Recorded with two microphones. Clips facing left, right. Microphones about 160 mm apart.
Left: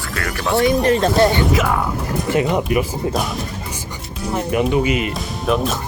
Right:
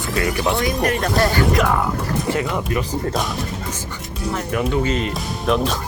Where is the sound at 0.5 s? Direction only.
25° left (ahead or behind).